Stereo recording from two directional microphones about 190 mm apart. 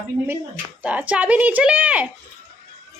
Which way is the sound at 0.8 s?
5° right (ahead or behind).